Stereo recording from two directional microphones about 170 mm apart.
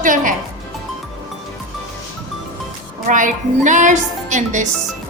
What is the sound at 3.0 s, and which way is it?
A woman's voice, 50° right (ahead or behind).